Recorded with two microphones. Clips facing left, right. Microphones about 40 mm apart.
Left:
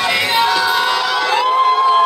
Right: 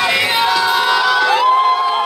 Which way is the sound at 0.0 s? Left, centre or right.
Centre.